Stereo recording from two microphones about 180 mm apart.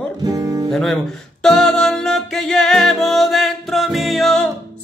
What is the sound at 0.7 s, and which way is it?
Music, centre (ahead or behind).